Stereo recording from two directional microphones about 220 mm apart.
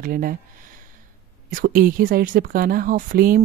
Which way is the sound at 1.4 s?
40° right (ahead or behind).